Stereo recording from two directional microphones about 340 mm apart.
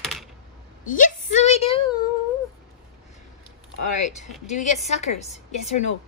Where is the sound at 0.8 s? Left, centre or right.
Left.